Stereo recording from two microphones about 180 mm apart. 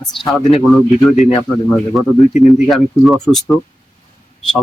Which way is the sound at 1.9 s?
Centre (ahead or behind).